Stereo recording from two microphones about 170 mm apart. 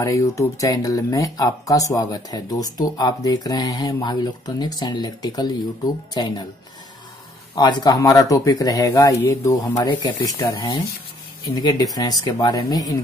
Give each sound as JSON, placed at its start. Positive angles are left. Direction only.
{"t": 0.0, "sound": "speech", "side_deg": 20}
{"t": 7.5, "sound": "speech", "side_deg": 25}